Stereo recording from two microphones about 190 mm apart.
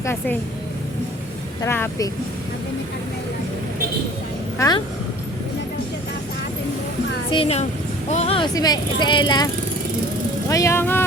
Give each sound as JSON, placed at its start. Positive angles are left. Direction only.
{"t": 0.0, "sound": "speech", "side_deg": 10}
{"t": 1.6, "sound": "speech", "side_deg": 10}
{"t": 4.5, "sound": "speech", "side_deg": 15}
{"t": 7.3, "sound": "speech", "side_deg": 30}
{"t": 8.5, "sound": "speech", "side_deg": 20}
{"t": 10.5, "sound": "speech", "side_deg": 15}